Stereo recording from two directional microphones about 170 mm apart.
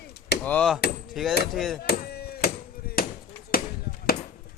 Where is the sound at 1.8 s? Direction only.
65° left (ahead or behind).